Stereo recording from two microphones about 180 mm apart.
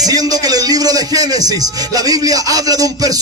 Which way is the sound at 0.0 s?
20° right (ahead or behind).